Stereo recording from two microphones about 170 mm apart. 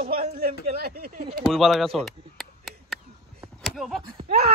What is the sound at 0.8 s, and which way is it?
Speech, 65° right (ahead or behind).